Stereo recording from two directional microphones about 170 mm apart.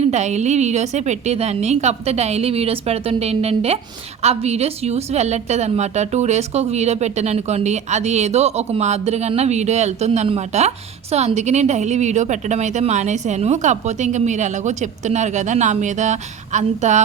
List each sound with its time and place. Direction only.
0.0 s a woman's voice: 40° right (ahead or behind)